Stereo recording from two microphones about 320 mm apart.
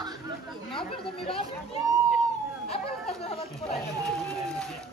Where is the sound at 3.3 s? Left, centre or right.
Centre.